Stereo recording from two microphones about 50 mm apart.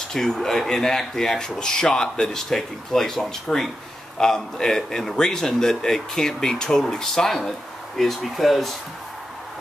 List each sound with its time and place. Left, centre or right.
0.1 s speech: centre